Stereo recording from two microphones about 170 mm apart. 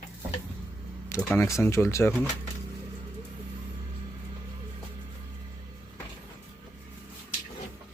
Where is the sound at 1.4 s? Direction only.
15° left (ahead or behind).